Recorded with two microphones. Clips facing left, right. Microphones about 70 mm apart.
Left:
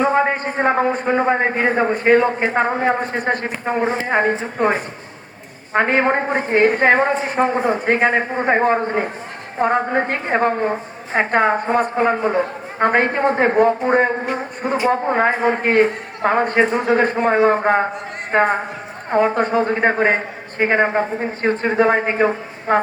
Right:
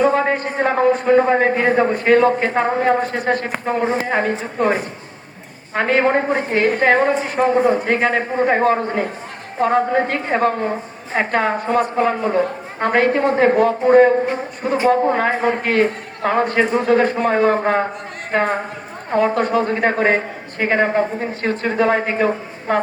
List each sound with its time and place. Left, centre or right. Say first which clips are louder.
0.0 s a sound: right 1 dB; centre
1.0 s a woman's voice: right 3 dB; centre
5.7 s a woman's voice: even; left